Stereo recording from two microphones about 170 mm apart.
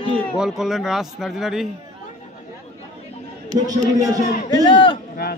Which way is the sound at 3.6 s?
20° right (ahead or behind).